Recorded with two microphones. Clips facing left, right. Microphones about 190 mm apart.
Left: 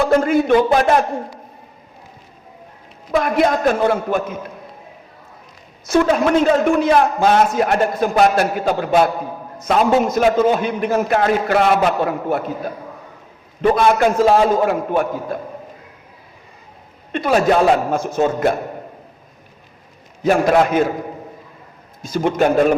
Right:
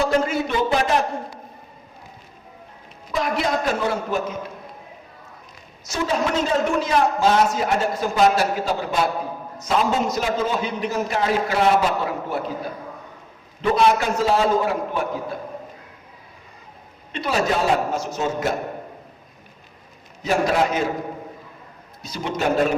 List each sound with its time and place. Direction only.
0.0 s a man's voice: 55° left (ahead or behind)
3.1 s a man's voice: 55° left (ahead or behind)
5.8 s a man's voice: 60° left (ahead or behind)
13.6 s a man's voice: 55° left (ahead or behind)
17.1 s a woman's voice: 50° left (ahead or behind)
20.2 s a man's voice: 55° left (ahead or behind)
22.0 s a man's voice: 50° left (ahead or behind)